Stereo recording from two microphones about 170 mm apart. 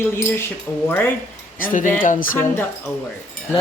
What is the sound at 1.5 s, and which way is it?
Speech, 55° left (ahead or behind).